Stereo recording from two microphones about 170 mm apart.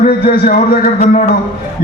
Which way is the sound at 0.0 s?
55° left (ahead or behind).